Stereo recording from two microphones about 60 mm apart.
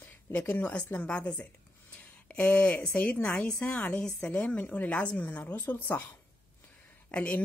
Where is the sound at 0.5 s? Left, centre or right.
Left.